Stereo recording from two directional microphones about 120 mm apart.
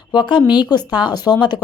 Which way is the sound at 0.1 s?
40° left (ahead or behind).